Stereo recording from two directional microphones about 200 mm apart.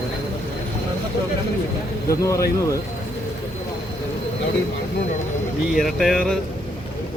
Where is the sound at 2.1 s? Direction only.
15° left (ahead or behind).